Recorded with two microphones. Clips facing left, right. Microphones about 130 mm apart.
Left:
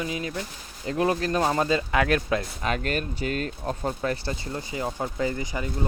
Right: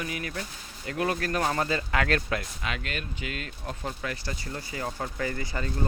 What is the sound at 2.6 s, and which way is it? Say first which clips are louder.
Speech: left 7 dB; 40° left (ahead or behind).